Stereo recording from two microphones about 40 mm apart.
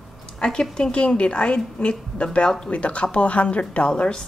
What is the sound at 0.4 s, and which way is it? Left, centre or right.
Speech, left.